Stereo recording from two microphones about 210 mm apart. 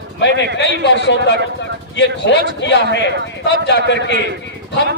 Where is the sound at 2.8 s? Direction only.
55° right (ahead or behind).